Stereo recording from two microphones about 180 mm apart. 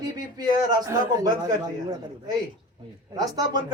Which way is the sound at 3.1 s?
20° right (ahead or behind).